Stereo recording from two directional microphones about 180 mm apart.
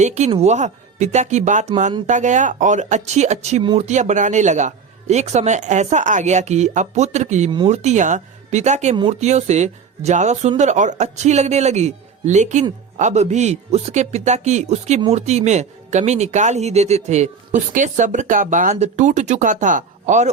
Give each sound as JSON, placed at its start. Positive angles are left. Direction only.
{"t": 0.0, "sound": "speech", "side_deg": -40}